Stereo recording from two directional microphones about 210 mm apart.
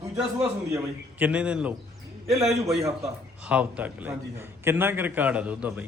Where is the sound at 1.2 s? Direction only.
5° right (ahead or behind).